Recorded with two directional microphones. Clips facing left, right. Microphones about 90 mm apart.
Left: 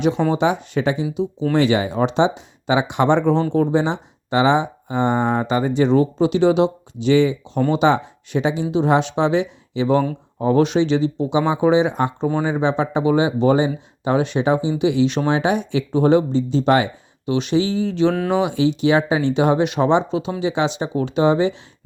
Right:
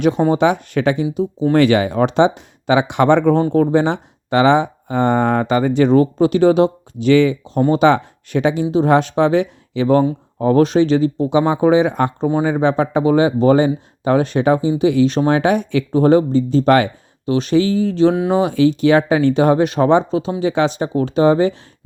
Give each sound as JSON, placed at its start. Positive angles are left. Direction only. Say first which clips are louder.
{"t": 0.0, "sound": "speech", "louder": "right 4 dB", "side_deg": -50}
{"t": 1.1, "sound": "speech", "louder": "right 3 dB", "side_deg": -45}
{"t": 1.5, "sound": "speech", "louder": "right 4 dB", "side_deg": -60}